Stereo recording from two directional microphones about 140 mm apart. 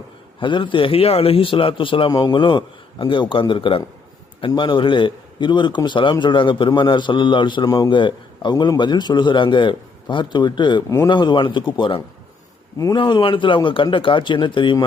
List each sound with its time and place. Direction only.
0.3 s a man's voice: 35° left (ahead or behind)
10.8 s speech: 20° left (ahead or behind)
11.1 s a man's voice: 35° left (ahead or behind)